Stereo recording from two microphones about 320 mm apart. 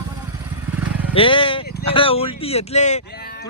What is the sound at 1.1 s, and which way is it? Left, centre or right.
Speech, centre.